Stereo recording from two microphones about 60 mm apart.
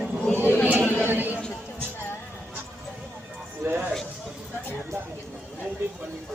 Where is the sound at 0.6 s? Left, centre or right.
Right.